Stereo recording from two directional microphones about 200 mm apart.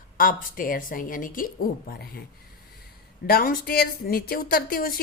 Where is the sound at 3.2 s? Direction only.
50° left (ahead or behind).